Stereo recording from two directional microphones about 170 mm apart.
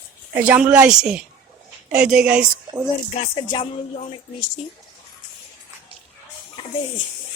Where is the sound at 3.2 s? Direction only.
30° left (ahead or behind).